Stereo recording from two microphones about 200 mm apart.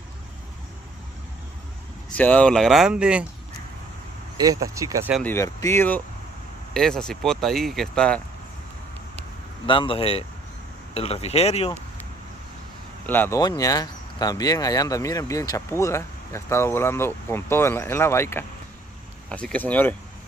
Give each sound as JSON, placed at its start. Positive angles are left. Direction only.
{"t": 2.1, "sound": "speech", "side_deg": 5}
{"t": 4.4, "sound": "speech", "side_deg": -15}
{"t": 5.2, "sound": "speech", "side_deg": 15}
{"t": 9.7, "sound": "speech", "side_deg": 25}
{"t": 13.0, "sound": "speech", "side_deg": 10}